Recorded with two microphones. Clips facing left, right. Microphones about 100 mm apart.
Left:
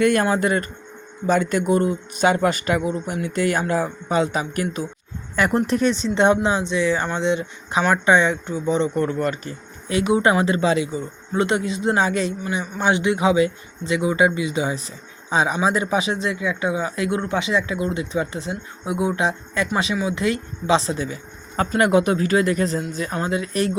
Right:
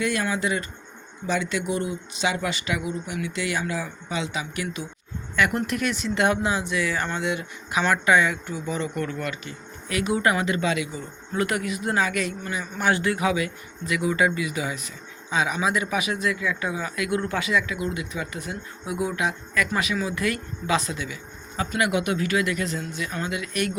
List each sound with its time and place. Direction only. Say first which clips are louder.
0.0 s speech: left 7 dB; 50° left (ahead or behind)
9.9 s speech: left 5 dB; 25° left (ahead or behind)